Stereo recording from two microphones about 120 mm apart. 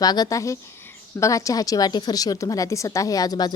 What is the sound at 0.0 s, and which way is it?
A woman's voice, 35° left (ahead or behind).